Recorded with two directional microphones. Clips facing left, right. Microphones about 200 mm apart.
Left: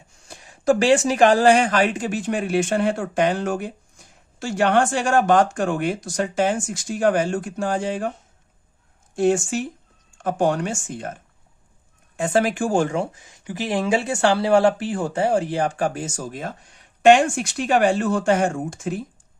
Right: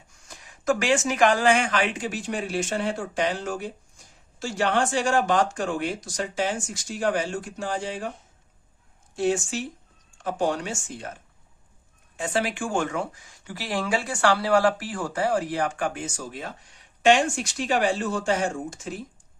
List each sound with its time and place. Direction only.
0.3 s speech: 30° left (ahead or behind); by 8.0 s 50° left (ahead or behind)
9.1 s speech: 50° left (ahead or behind)
12.1 s speech: 50° left (ahead or behind)